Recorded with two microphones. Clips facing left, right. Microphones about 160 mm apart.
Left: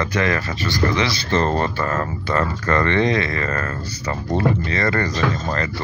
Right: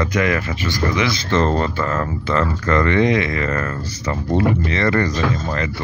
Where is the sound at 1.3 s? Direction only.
15° left (ahead or behind).